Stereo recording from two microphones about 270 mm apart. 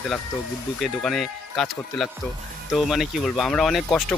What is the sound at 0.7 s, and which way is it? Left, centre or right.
Speech, centre.